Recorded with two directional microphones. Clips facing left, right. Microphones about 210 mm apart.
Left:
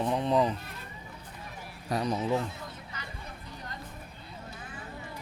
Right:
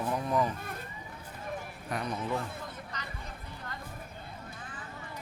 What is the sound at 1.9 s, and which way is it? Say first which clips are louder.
Speech: left 5 dB; 35° left (ahead or behind).